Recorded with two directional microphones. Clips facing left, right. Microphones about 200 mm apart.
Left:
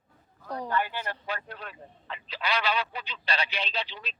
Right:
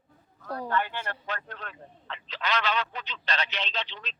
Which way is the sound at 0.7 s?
10° left (ahead or behind).